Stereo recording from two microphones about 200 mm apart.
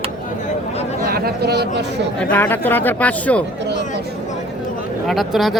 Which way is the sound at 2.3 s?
10° left (ahead or behind).